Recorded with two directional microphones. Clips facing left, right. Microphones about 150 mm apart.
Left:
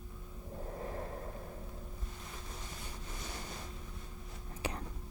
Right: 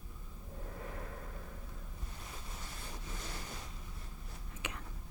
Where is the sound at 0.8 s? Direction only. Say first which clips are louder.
Left 5 dB; 35° left (ahead or behind).